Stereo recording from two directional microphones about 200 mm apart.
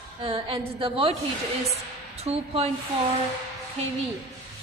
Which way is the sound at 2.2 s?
30° right (ahead or behind).